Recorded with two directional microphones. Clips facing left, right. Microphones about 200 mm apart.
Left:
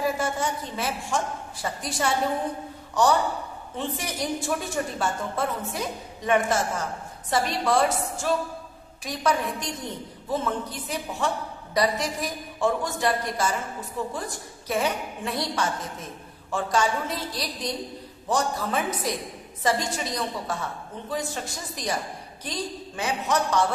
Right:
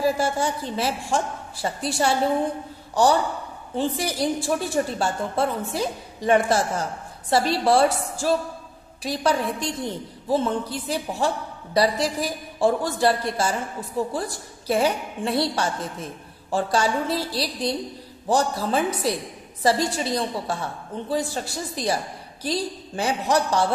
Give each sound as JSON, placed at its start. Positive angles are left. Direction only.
{"t": 0.2, "sound": "a woman's voice", "side_deg": -30}